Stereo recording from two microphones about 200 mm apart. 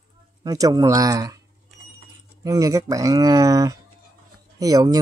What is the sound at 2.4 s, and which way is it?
Speech, 15° right (ahead or behind).